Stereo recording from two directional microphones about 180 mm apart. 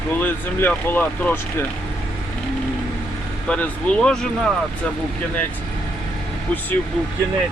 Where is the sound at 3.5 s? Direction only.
5° left (ahead or behind).